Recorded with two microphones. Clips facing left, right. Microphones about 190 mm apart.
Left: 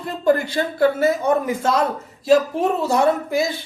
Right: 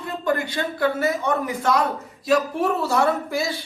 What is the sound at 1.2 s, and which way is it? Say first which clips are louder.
Speech: left 4 dB; 25° left (ahead or behind).